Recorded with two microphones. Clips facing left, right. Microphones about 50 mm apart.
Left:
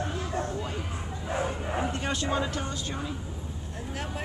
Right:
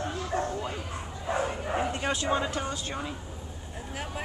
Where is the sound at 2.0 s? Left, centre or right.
Centre.